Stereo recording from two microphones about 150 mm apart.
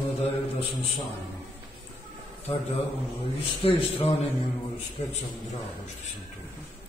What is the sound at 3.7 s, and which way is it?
Speech, 40° left (ahead or behind).